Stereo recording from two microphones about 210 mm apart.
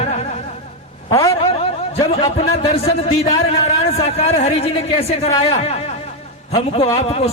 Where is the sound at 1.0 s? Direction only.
15° left (ahead or behind).